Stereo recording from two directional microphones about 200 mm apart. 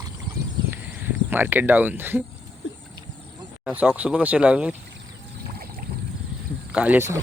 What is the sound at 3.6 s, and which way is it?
Speech, 5° right (ahead or behind).